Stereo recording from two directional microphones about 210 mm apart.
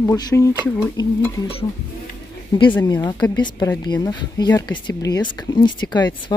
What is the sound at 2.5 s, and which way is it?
Speech, 20° left (ahead or behind).